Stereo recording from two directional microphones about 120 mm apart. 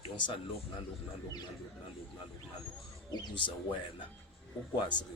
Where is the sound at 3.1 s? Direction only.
35° left (ahead or behind).